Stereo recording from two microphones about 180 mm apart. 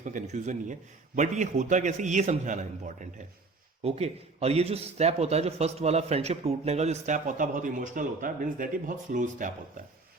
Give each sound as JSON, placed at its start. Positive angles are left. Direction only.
{"t": 0.0, "sound": "a man's voice", "side_deg": -45}